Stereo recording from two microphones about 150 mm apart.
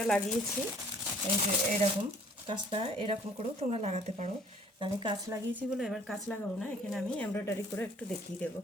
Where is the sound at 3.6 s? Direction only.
45° right (ahead or behind).